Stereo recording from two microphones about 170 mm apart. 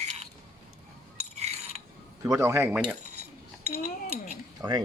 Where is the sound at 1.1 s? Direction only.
40° right (ahead or behind).